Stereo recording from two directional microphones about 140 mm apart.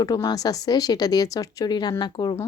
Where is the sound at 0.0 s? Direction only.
25° left (ahead or behind).